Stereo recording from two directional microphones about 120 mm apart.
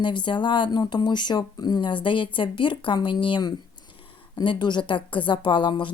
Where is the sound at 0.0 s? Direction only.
40° left (ahead or behind).